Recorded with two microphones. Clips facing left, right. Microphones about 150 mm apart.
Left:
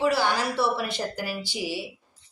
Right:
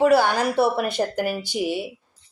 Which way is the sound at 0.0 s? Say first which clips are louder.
Right 6 dB; 50° right (ahead or behind).